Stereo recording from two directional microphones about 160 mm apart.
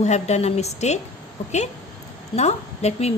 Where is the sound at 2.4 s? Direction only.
45° left (ahead or behind).